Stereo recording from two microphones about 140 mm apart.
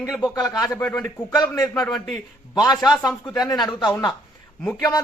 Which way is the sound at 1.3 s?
30° left (ahead or behind).